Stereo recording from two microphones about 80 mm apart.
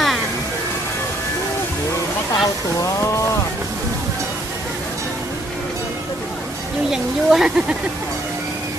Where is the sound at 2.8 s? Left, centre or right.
Left.